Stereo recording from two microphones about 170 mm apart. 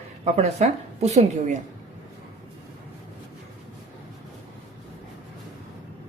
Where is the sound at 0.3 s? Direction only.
40° right (ahead or behind).